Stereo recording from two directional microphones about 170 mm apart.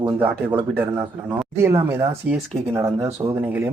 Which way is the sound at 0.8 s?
15° right (ahead or behind).